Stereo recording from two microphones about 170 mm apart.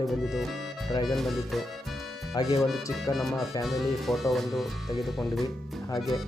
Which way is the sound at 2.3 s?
20° left (ahead or behind).